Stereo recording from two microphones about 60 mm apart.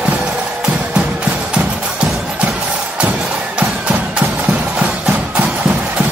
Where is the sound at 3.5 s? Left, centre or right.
Right.